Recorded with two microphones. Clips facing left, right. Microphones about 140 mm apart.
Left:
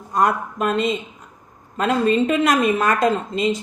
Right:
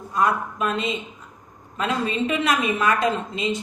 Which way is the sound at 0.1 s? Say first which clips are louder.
Left 3 dB; 45° left (ahead or behind).